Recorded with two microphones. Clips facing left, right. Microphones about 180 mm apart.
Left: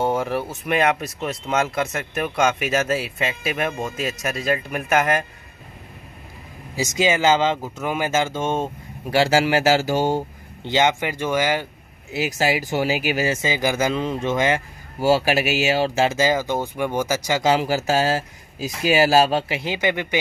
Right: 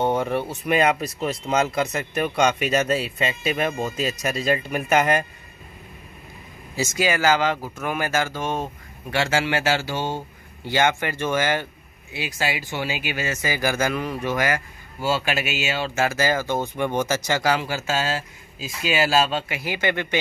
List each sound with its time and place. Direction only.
0.0 s speech: 5° left (ahead or behind)
6.7 s speech: 15° left (ahead or behind)
9.1 s speech: 35° left (ahead or behind)
10.6 s speech: 20° left (ahead or behind)
12.2 s speech: 40° left (ahead or behind)
13.4 s speech: 20° left (ahead or behind)
15.0 s speech: 40° left (ahead or behind)
16.2 s speech: 15° left (ahead or behind)
17.6 s speech: 40° left (ahead or behind)
19.6 s speech: 15° left (ahead or behind)